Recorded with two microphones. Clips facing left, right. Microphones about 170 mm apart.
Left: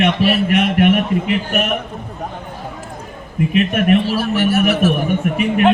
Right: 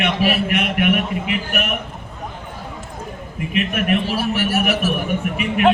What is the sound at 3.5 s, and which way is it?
Speech, 40° left (ahead or behind).